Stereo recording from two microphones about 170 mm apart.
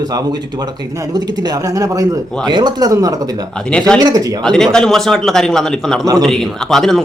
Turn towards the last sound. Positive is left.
turn(degrees=0)  # may be behind; listen again after turning